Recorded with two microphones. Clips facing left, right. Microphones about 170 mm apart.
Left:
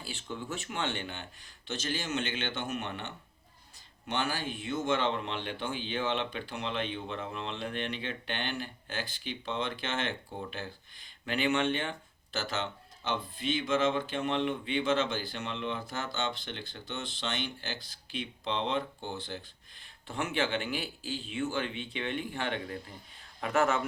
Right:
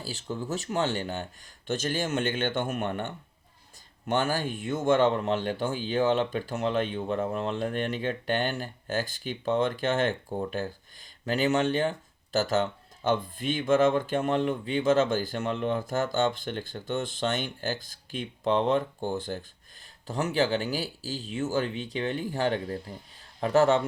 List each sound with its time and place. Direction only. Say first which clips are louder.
0.0 s a man's voice: right 5 dB; 40° right (ahead or behind)